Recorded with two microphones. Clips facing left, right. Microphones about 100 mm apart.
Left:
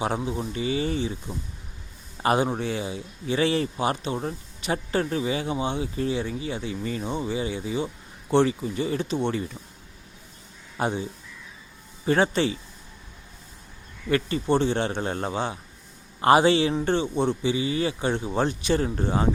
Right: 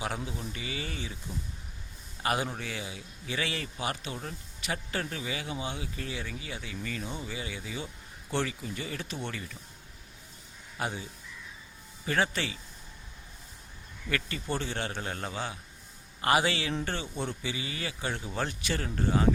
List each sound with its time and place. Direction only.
0.0 s a man's voice: 30° left (ahead or behind)
10.8 s speech: 30° left (ahead or behind)
12.0 s speech: 30° left (ahead or behind)
14.1 s speech: 30° left (ahead or behind)